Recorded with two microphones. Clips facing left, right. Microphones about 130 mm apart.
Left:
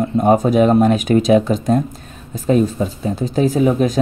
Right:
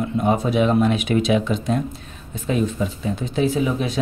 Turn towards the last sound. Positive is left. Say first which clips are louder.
# left 6 dB
turn(degrees=45)  # may be behind; listen again after turning